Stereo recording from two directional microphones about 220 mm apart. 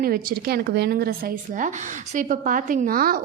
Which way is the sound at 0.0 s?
40° right (ahead or behind).